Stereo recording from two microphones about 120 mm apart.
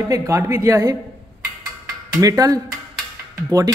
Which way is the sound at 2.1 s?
30° right (ahead or behind).